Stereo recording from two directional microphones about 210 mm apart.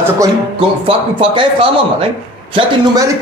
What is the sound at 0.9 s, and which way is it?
A man's voice, 25° right (ahead or behind).